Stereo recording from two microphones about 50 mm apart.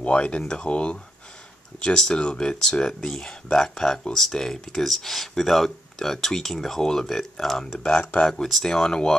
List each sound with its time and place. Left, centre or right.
0.0 s speech: left
8.0 s speech: left
8.3 s speech: centre
8.6 s speech: centre